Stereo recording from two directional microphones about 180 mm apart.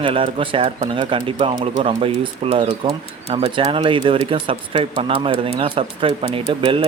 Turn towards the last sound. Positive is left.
turn(degrees=-30)  # may be behind; listen again after turning